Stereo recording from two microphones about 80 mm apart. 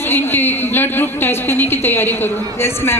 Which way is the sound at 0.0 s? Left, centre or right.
Left.